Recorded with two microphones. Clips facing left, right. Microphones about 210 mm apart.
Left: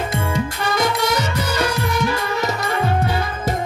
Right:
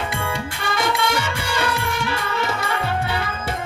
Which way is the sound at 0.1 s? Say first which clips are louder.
Left 4 dB; 40° left (ahead or behind).